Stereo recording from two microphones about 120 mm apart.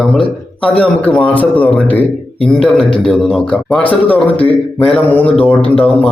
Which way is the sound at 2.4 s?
5° left (ahead or behind).